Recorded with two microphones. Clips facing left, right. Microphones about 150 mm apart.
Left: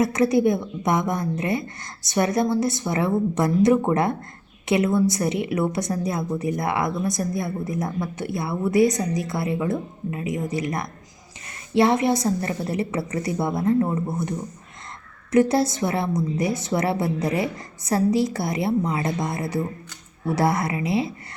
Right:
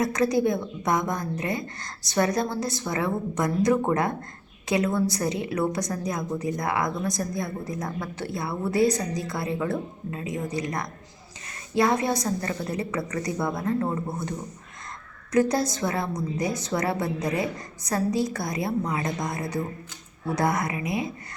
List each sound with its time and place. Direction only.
0.0 s a woman's voice: 25° left (ahead or behind)
15.3 s a woman's voice: 25° left (ahead or behind)